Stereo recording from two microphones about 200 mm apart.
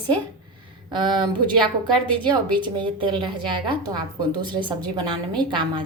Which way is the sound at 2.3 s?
25° right (ahead or behind).